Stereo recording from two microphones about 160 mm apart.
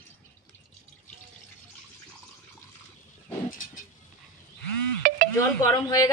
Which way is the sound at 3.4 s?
55° left (ahead or behind).